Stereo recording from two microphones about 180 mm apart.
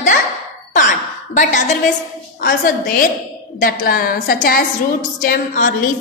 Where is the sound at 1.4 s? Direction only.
45° left (ahead or behind).